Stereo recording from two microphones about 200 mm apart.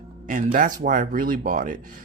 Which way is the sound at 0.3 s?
40° right (ahead or behind).